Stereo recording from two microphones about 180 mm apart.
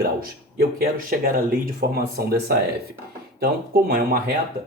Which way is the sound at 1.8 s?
65° right (ahead or behind).